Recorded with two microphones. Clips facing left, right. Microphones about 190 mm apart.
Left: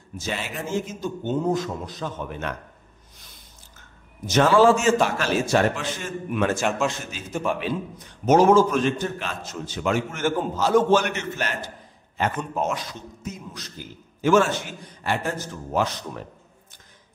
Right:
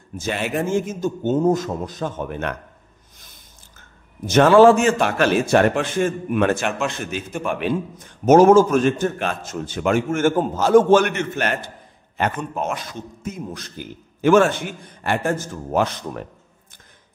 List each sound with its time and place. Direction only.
0.2 s a man's voice: 55° right (ahead or behind)
4.3 s a man's voice: 60° right (ahead or behind)